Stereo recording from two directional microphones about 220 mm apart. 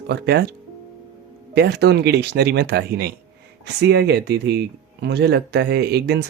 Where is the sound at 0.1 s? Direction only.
50° right (ahead or behind).